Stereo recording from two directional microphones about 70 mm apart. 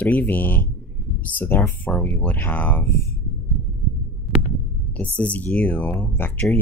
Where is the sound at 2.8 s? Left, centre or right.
Left.